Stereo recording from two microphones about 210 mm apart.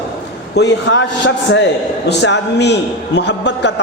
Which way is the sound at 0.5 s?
55° left (ahead or behind).